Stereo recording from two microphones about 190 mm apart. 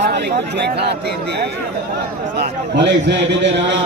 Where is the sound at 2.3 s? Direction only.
65° right (ahead or behind).